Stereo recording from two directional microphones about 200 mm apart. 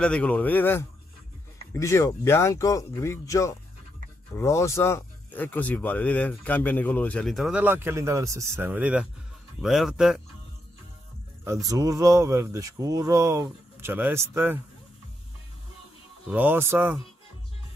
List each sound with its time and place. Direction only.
0.0 s speech: 5° left (ahead or behind)
11.4 s speech: 15° right (ahead or behind)
16.3 s speech: 10° right (ahead or behind)